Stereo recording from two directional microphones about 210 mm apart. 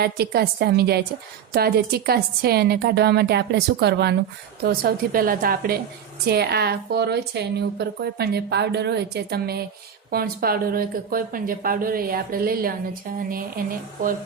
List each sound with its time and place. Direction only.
0.0 s a woman's voice: 50° right (ahead or behind)